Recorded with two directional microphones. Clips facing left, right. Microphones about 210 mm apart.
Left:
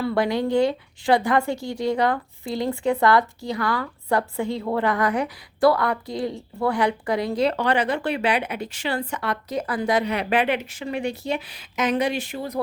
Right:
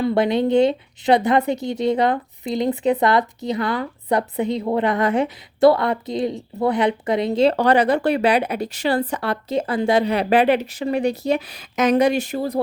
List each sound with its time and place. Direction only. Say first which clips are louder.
0.0 s a woman's voice: right 4 dB; 20° right (ahead or behind)
7.5 s speech: right 6 dB; 40° right (ahead or behind)